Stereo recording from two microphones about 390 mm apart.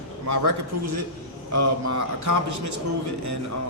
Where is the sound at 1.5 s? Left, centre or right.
Right.